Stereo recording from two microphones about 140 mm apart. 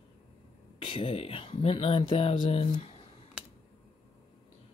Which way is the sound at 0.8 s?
45° left (ahead or behind).